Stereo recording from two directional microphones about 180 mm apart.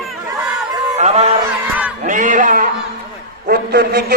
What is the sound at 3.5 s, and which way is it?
Speech, 60° right (ahead or behind).